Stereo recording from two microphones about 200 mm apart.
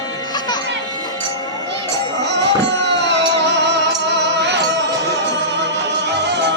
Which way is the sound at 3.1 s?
60° right (ahead or behind).